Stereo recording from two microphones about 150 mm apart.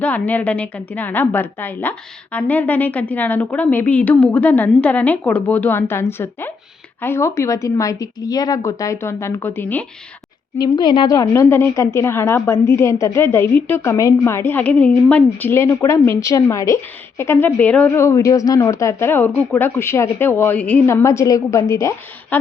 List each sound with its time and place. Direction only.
0.0 s a woman's voice: 10° left (ahead or behind)
10.6 s a woman's voice: 30° left (ahead or behind)